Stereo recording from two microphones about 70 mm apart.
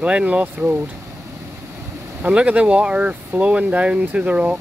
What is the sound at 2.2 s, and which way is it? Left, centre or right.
Speech, right.